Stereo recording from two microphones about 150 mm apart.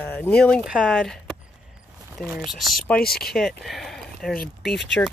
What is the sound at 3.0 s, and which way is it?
Speech, 90° left.